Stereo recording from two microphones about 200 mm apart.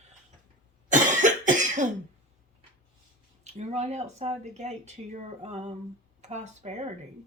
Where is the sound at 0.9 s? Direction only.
40° right (ahead or behind).